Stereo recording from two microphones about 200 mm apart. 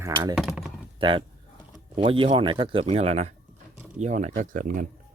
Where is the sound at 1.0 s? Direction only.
25° right (ahead or behind); by 4.8 s 45° right (ahead or behind).